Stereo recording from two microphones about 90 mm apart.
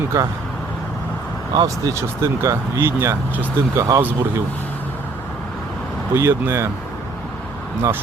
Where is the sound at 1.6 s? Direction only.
35° right (ahead or behind).